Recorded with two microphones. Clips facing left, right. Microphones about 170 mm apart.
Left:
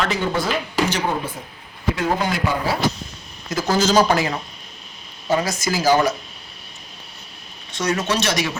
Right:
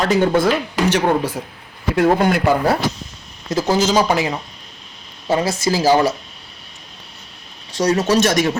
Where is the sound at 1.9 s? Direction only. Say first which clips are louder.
Right 9 dB; 55° right (ahead or behind).